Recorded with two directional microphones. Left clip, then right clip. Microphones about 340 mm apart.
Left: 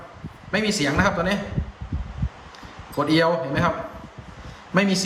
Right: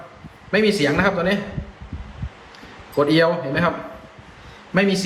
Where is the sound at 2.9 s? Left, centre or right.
Centre.